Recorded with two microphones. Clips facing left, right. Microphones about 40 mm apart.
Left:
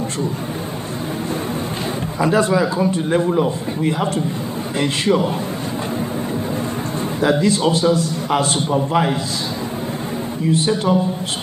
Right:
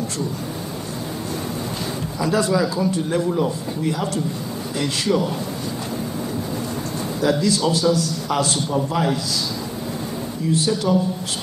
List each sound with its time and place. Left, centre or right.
2.1 s a man's voice: left
7.2 s a man's voice: left
10.5 s a man's voice: left